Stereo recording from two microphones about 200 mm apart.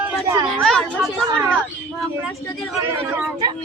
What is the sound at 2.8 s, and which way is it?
Child singing, 10° right (ahead or behind).